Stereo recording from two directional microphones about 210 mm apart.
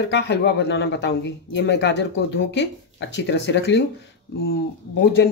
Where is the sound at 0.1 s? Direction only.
55° left (ahead or behind).